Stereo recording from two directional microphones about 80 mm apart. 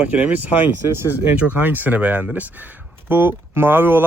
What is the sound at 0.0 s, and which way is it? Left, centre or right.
Speech, centre.